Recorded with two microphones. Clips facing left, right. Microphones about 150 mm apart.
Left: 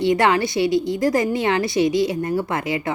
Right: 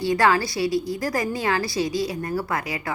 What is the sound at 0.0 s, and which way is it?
A woman's voice, 20° left (ahead or behind).